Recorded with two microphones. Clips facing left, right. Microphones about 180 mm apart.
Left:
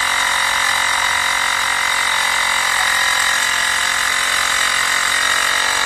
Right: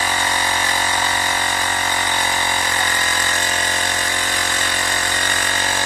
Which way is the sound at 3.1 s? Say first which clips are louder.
Right 2 dB; 45° right (ahead or behind).